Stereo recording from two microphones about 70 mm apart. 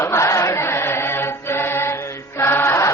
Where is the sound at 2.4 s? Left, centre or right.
Left.